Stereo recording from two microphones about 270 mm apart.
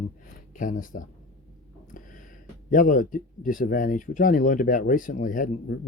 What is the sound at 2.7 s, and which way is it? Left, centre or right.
Speech, left.